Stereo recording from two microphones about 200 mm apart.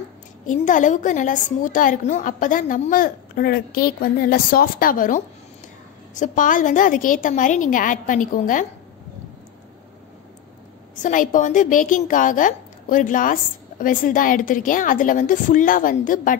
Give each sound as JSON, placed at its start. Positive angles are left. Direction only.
{"t": 0.5, "sound": "a woman's voice", "side_deg": 40}
{"t": 11.0, "sound": "a woman's voice", "side_deg": 40}